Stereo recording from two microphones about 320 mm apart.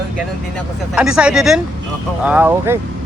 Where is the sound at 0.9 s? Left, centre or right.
Centre.